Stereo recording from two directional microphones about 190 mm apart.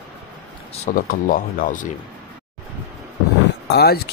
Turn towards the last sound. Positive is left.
turn(degrees=55)  # may be behind; listen again after turning